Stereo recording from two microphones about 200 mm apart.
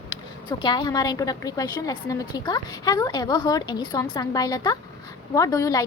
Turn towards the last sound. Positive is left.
turn(degrees=15)  # may be behind; listen again after turning